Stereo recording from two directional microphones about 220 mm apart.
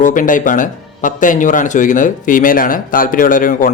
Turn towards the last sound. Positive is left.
turn(degrees=40)  # may be behind; listen again after turning